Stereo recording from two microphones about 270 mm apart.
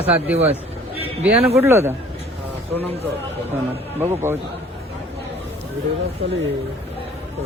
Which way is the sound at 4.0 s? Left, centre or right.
Centre.